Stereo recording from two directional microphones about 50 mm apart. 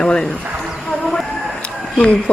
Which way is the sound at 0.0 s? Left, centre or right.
Centre.